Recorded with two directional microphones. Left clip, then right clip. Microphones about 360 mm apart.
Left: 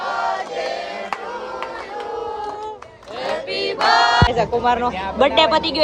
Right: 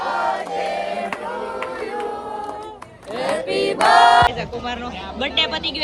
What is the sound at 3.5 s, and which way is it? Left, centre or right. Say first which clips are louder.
Singing: right 4 dB; centre.